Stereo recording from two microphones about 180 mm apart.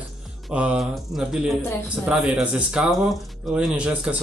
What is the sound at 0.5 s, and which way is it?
Speech, 5° right (ahead or behind).